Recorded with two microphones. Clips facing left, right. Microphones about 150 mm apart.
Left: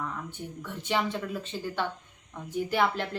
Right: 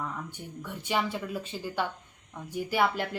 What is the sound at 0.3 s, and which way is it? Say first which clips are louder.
Speech: left 1 dB; 10° right (ahead or behind).